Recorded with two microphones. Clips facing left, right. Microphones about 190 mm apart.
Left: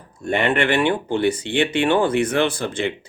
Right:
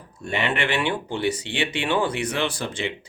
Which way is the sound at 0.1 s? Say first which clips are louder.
Left 6 dB; 50° left (ahead or behind).